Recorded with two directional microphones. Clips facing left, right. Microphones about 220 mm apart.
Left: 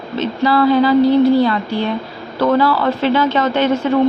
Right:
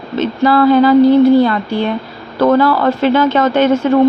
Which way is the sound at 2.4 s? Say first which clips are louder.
Right 3 dB; 50° right (ahead or behind).